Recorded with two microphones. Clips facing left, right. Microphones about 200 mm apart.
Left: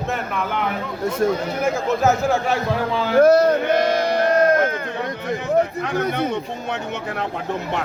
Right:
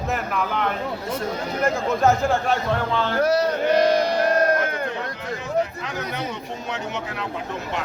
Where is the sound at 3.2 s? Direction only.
50° left (ahead or behind).